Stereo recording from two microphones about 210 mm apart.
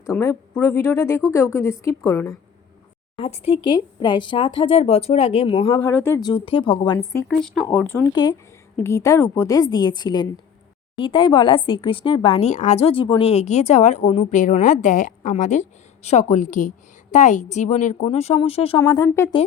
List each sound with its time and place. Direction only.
0.0 s a woman's voice: 15° left (ahead or behind)
3.2 s speech: 25° left (ahead or behind)
7.3 s speech: centre (ahead or behind)
8.1 s a woman's voice: 20° left (ahead or behind)
18.8 s a woman's voice: 15° left (ahead or behind)